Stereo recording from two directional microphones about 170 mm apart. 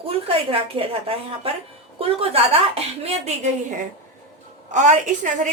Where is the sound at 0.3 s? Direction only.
35° right (ahead or behind).